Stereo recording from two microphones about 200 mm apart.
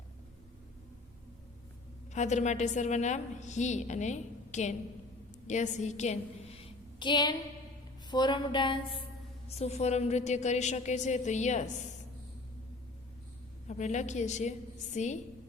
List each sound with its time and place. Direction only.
2.1 s a woman's voice: 35° left (ahead or behind)
6.6 s a sound: 25° left (ahead or behind)
8.1 s a woman's voice: 20° left (ahead or behind)
13.7 s a woman's voice: 35° left (ahead or behind)